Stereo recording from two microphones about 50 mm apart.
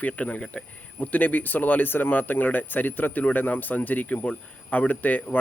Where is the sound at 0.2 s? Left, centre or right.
Left.